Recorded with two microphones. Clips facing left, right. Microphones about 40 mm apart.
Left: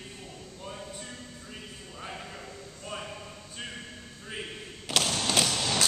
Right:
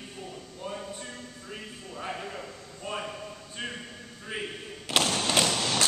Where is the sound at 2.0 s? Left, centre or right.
Centre.